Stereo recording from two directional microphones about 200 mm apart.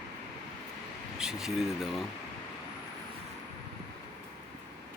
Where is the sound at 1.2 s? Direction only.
5° right (ahead or behind).